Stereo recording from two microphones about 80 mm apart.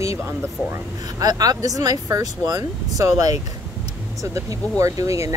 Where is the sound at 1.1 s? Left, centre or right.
Right.